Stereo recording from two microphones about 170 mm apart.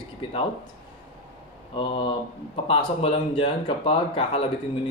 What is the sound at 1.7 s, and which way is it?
Speech, 30° left (ahead or behind).